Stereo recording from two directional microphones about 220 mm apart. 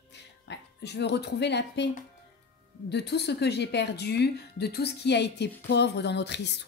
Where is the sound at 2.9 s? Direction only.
50° left (ahead or behind).